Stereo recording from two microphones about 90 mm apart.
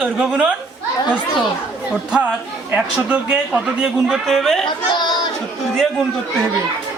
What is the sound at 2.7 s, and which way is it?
A man's voice, 15° right (ahead or behind).